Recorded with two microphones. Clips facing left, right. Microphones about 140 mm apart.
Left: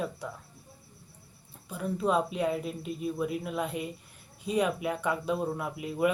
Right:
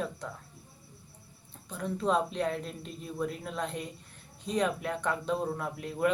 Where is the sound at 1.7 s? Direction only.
10° left (ahead or behind).